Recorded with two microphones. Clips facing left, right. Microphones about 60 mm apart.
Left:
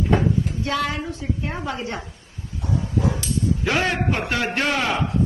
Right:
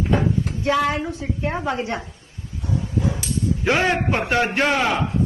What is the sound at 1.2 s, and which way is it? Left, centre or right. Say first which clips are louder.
Speech: right 3 dB; right.